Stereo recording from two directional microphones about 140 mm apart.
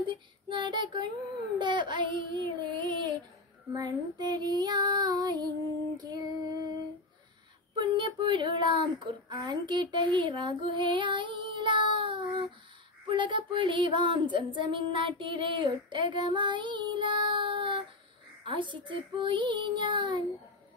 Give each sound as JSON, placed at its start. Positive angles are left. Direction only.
{"t": 0.5, "sound": "a child's voice", "side_deg": -35}
{"t": 3.7, "sound": "child singing", "side_deg": -30}
{"t": 7.7, "sound": "child singing", "side_deg": -35}
{"t": 13.1, "sound": "female singing", "side_deg": -35}